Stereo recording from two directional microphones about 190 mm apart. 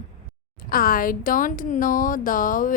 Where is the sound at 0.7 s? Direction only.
50° left (ahead or behind).